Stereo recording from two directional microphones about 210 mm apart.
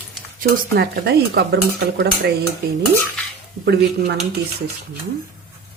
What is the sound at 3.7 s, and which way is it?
Speech, 50° right (ahead or behind).